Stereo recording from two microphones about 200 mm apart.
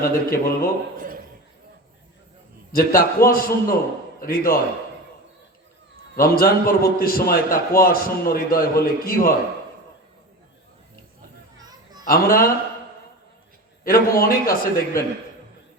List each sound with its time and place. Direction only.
0.0 s a man's voice: 45° left (ahead or behind)
0.9 s a sound: 45° right (ahead or behind)
2.7 s a man's voice: 45° left (ahead or behind)
6.1 s a man's voice: 45° left (ahead or behind)
11.6 s children playing: 20° right (ahead or behind)
12.0 s a man's voice: 45° left (ahead or behind)
13.8 s a man's voice: 45° left (ahead or behind)